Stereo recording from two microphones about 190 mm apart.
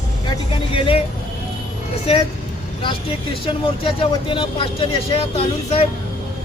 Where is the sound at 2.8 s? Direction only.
25° left (ahead or behind).